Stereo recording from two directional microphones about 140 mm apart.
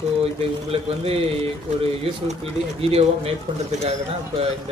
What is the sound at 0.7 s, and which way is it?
A man's voice, 45° right (ahead or behind).